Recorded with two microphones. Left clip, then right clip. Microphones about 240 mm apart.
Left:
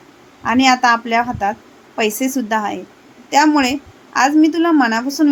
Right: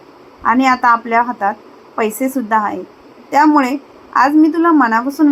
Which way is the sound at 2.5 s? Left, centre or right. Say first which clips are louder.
Right 4 dB; centre.